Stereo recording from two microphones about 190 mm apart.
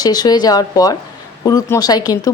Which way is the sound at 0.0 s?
20° left (ahead or behind).